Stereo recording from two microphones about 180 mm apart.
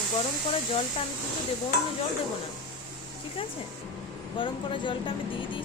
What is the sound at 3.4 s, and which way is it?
Speech, 30° left (ahead or behind).